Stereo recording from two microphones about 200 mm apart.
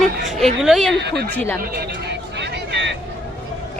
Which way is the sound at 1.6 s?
50° right (ahead or behind).